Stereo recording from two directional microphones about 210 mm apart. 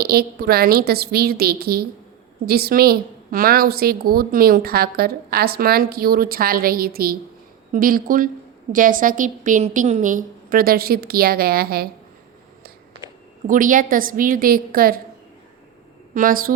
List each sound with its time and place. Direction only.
0.0 s a woman's voice: 45° right (ahead or behind)
13.5 s a woman's voice: 40° right (ahead or behind)
16.1 s a woman's voice: 40° right (ahead or behind)